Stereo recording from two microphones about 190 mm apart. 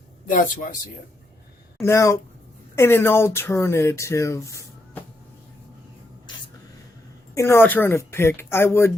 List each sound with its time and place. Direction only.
0.3 s speech: 45° left (ahead or behind)
1.8 s speech: 15° left (ahead or behind)
7.3 s speech: 15° left (ahead or behind)